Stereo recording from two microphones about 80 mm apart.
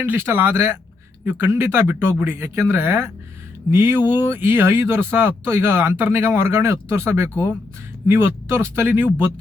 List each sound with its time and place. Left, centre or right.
0.0 s speech: right